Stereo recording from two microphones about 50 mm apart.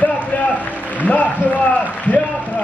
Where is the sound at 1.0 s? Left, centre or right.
Left.